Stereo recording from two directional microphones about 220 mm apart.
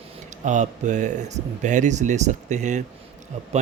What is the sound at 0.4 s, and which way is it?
Speech, 35° right (ahead or behind).